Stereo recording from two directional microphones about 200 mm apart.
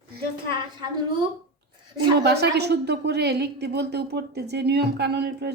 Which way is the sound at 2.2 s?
55° right (ahead or behind).